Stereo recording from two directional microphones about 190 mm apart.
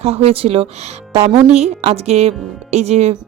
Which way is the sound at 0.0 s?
30° right (ahead or behind).